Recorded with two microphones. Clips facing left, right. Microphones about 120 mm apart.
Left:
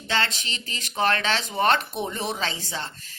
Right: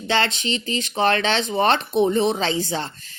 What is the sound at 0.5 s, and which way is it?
Speech, 45° left (ahead or behind).